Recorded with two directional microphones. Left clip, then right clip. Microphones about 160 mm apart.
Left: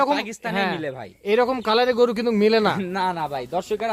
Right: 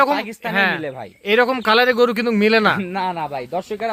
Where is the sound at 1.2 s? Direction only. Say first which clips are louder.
Right 4 dB; centre (ahead or behind).